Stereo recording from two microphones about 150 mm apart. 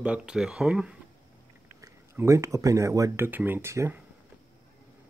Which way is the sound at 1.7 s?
20° right (ahead or behind).